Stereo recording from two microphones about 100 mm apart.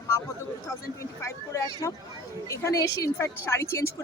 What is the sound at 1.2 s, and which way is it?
A woman's voice, 30° left (ahead or behind).